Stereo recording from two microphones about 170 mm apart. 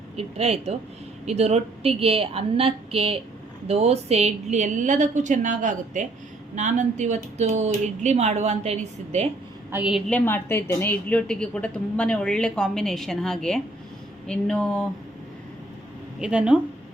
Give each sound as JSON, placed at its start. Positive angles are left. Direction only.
{"t": 0.2, "sound": "a woman's voice", "side_deg": -35}
{"t": 9.7, "sound": "speech", "side_deg": -5}
{"t": 10.1, "sound": "a woman's voice", "side_deg": 10}
{"t": 16.2, "sound": "speech", "side_deg": -5}